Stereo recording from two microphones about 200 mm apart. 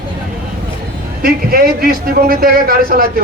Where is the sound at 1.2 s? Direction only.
50° right (ahead or behind).